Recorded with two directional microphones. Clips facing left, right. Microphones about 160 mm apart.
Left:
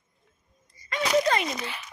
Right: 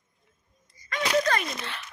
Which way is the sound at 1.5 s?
5° left (ahead or behind).